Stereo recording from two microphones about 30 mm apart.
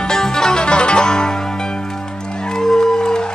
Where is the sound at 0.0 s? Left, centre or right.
Left.